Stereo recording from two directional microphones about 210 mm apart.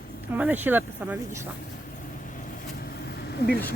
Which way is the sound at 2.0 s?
40° left (ahead or behind).